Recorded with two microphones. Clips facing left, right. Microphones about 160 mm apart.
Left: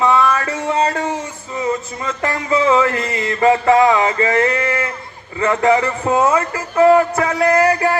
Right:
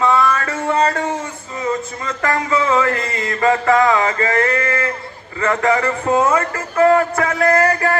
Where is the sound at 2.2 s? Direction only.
25° left (ahead or behind).